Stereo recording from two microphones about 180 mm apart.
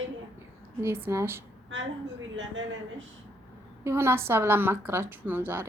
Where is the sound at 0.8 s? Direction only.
15° right (ahead or behind).